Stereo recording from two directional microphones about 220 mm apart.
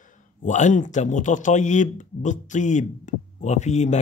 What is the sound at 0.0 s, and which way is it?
A man's voice, 35° left (ahead or behind).